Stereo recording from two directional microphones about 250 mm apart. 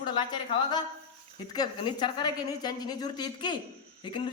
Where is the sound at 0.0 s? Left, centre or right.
Centre.